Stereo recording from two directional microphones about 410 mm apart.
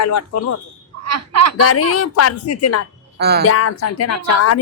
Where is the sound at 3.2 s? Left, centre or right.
Right.